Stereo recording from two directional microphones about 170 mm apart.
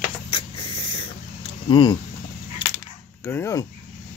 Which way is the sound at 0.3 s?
35° left (ahead or behind).